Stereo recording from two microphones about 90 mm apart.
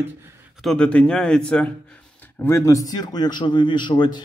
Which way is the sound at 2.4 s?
30° left (ahead or behind).